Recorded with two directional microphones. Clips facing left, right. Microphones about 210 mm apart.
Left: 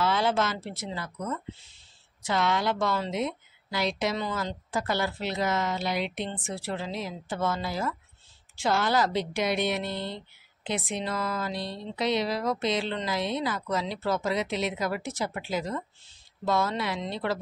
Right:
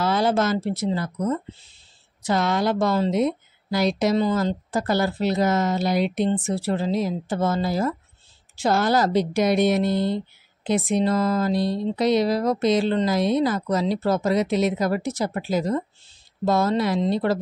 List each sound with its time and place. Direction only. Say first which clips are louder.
0.0 s speech: right 5 dB; 40° right (ahead or behind)